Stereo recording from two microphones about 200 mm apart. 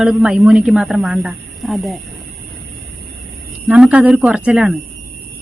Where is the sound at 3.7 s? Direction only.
5° right (ahead or behind).